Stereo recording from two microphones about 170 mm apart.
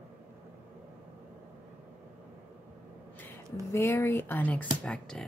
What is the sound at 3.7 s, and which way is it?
Speech, 15° left (ahead or behind).